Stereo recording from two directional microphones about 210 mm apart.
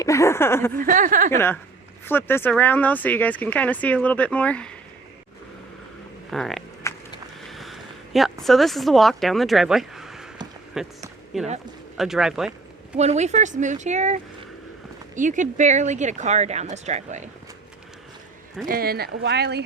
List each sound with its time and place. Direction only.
0.0 s speech: 15° left (ahead or behind)
0.8 s speech: 40° right (ahead or behind)
1.3 s speech: 10° left (ahead or behind)
6.3 s speech: centre (ahead or behind)
6.8 s walk: 15° left (ahead or behind)
7.5 s speech: centre (ahead or behind)
13.0 s speech: 30° right (ahead or behind)
18.7 s speech: 45° right (ahead or behind)